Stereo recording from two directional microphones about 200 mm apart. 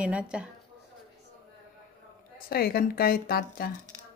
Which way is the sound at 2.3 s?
50° left (ahead or behind).